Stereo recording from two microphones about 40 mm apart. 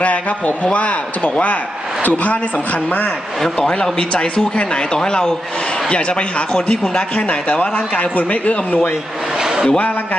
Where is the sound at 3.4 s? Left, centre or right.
Centre.